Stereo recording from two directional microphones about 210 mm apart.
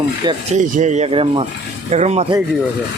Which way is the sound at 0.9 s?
25° right (ahead or behind).